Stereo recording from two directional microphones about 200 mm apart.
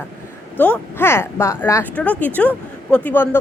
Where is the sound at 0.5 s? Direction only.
10° left (ahead or behind).